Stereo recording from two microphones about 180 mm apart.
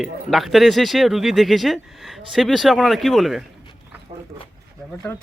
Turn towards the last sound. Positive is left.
turn(degrees=0)  # may be behind; listen again after turning